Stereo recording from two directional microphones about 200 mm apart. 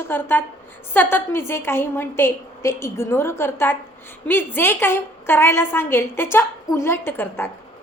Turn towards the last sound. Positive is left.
turn(degrees=10)  # may be behind; listen again after turning